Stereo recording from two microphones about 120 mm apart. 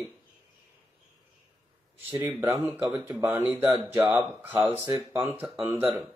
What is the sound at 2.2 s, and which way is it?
Speech, 15° right (ahead or behind).